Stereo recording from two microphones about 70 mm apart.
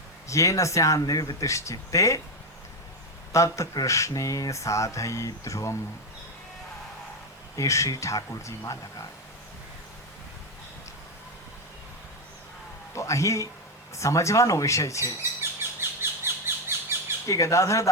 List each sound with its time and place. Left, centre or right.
0.3 s speech: left
3.3 s speech: left
7.5 s speech: left
12.9 s a man's voice: left
15.4 s a sound: right
17.2 s speech: left